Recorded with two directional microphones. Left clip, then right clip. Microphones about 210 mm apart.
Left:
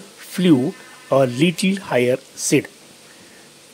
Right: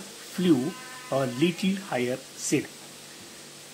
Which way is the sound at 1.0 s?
55° left (ahead or behind).